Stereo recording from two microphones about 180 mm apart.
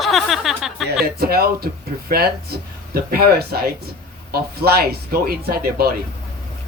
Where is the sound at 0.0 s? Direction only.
Centre (ahead or behind).